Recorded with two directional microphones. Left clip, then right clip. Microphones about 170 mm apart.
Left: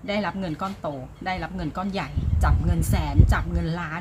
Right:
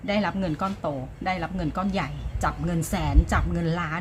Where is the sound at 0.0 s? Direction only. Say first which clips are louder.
Right 1 dB; 10° right (ahead or behind).